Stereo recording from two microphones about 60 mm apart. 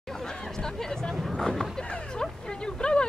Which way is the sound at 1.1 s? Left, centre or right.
Centre.